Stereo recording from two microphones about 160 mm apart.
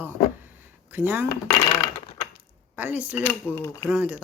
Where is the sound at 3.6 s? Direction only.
15° left (ahead or behind).